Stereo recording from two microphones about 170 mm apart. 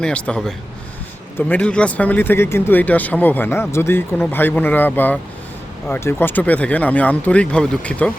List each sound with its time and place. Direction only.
0.0 s speech: 5° left (ahead or behind)